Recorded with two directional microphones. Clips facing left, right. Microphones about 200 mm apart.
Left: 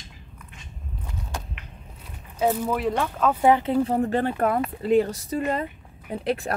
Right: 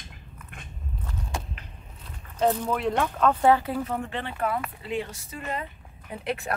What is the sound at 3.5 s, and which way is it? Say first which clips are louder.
Speech: left 5 dB; 25° left (ahead or behind).